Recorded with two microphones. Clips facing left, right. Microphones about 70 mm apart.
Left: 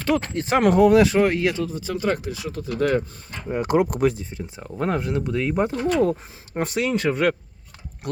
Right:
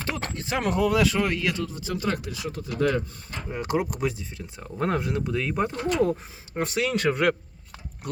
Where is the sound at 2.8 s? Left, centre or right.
Left.